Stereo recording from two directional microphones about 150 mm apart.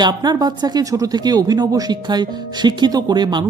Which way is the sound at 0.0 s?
25° right (ahead or behind).